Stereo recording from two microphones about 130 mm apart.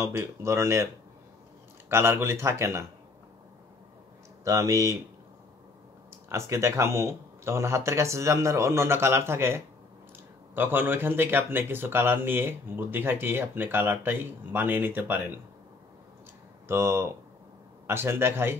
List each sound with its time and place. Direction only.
0.0 s speech: 20° right (ahead or behind)
1.9 s speech: 20° right (ahead or behind)
4.5 s speech: 25° right (ahead or behind)
6.2 s speech: 20° right (ahead or behind)
16.6 s speech: 20° right (ahead or behind)